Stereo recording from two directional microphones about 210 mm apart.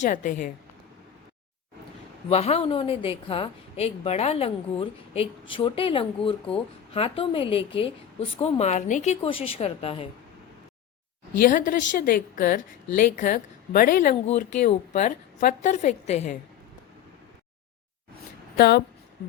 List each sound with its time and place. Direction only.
0.0 s a woman's voice: 40° left (ahead or behind)
2.3 s a woman's voice: 30° left (ahead or behind)
11.3 s a woman's voice: 40° left (ahead or behind)
18.5 s speech: 50° left (ahead or behind)